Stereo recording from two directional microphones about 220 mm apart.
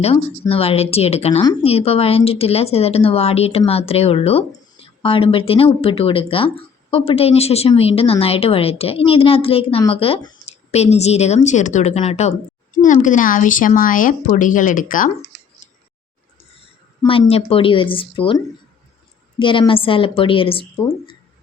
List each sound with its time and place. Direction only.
0.0 s speech: 25° left (ahead or behind)
15.6 s scissors: 35° left (ahead or behind)
17.1 s speech: 25° left (ahead or behind)
20.7 s speech: 15° left (ahead or behind)